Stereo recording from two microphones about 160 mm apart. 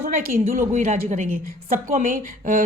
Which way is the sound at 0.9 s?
60° right (ahead or behind).